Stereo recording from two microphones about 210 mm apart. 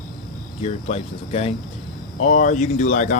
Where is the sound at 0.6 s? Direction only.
30° left (ahead or behind).